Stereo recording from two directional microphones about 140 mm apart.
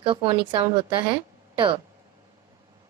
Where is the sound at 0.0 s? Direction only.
35° right (ahead or behind).